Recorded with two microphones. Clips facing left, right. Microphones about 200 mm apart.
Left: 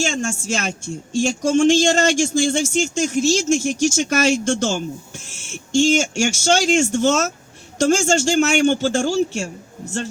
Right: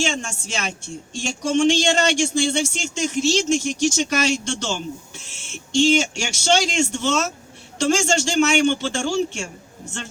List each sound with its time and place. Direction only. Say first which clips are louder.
0.0 s speech: left 3 dB; 45° left (ahead or behind)